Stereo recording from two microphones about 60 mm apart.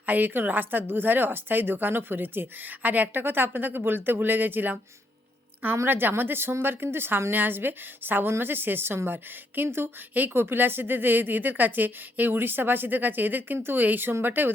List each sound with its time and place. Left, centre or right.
0.0 s speech: right